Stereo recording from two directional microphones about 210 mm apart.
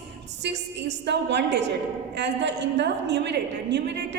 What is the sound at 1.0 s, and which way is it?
A woman's voice, 55° right (ahead or behind).